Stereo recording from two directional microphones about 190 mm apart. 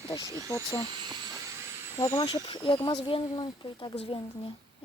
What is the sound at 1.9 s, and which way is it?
Speech, 15° left (ahead or behind).